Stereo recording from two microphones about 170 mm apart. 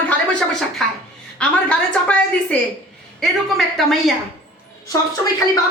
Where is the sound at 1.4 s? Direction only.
5° left (ahead or behind).